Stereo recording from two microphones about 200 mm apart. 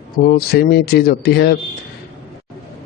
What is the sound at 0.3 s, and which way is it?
Speech, 55° left (ahead or behind).